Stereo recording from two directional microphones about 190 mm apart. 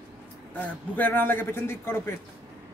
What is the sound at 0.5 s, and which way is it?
A man's voice, 10° left (ahead or behind).